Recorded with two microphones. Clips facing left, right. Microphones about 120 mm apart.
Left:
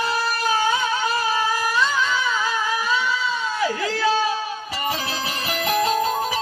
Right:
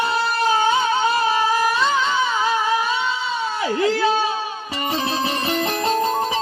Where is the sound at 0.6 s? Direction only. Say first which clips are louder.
Right 4 dB; 25° right (ahead or behind).